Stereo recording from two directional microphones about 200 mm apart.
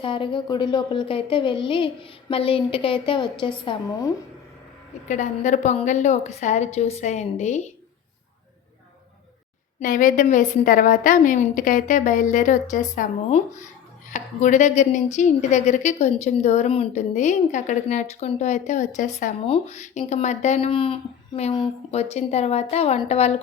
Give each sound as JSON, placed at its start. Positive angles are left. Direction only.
{"t": 0.0, "sound": "a woman's voice", "side_deg": 25}
{"t": 5.0, "sound": "speech", "side_deg": 40}
{"t": 9.8, "sound": "speech", "side_deg": 40}